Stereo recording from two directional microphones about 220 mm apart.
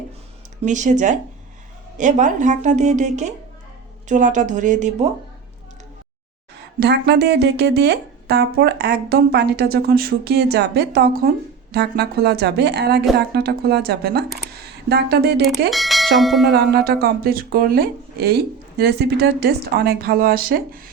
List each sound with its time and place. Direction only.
0.6 s speech: 35° right (ahead or behind)
6.7 s speech: 50° right (ahead or behind)
15.7 s speech: centre (ahead or behind)
16.5 s speech: 45° right (ahead or behind)